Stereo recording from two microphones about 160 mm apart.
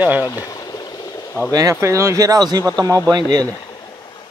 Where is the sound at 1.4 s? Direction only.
15° left (ahead or behind).